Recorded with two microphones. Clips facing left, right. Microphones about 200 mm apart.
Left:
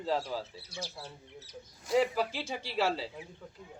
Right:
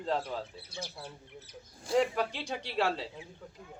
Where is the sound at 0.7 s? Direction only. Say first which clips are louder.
Even; 55° right (ahead or behind).